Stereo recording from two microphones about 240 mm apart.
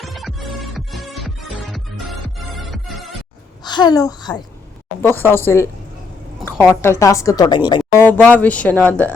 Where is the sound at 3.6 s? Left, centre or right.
Centre.